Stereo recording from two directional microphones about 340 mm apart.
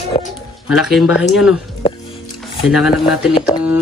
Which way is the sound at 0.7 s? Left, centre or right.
Centre.